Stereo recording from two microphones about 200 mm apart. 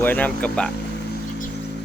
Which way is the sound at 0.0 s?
10° left (ahead or behind).